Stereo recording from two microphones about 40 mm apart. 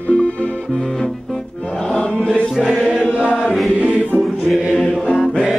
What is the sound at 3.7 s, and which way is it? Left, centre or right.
Music, right.